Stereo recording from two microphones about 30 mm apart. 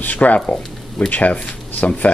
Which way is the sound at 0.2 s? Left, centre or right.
Left.